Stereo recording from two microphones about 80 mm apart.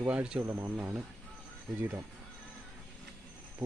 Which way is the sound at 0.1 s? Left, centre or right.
Centre.